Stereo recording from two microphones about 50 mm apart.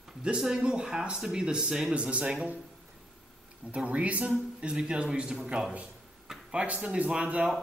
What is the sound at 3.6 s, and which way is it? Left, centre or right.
Speech, right.